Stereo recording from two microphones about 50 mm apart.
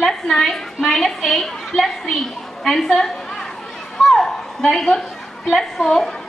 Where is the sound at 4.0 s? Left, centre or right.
Centre.